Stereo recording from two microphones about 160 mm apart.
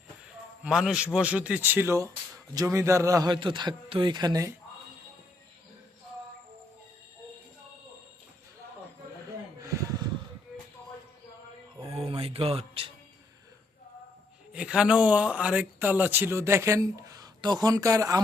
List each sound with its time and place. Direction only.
0.6 s speech: 5° right (ahead or behind); by 4.5 s 25° right (ahead or behind)
9.6 s a sound: 20° right (ahead or behind)
11.8 s music: 40° right (ahead or behind)
14.5 s speech: 5° right (ahead or behind); by 18.2 s 20° right (ahead or behind)